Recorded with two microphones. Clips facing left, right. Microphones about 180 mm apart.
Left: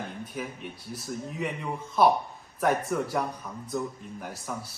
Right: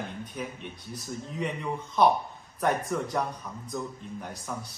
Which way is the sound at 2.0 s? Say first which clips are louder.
Left 1 dB; 5° left (ahead or behind).